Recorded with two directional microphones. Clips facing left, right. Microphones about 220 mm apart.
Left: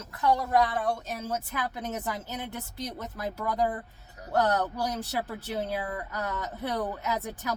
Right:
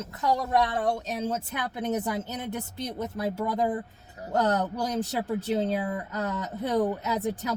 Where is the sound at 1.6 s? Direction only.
20° right (ahead or behind).